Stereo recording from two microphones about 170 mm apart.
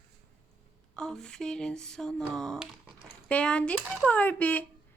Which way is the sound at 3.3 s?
5° left (ahead or behind).